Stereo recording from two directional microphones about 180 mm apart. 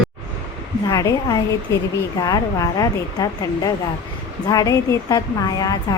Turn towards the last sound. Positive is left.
turn(degrees=20)  # may be behind; listen again after turning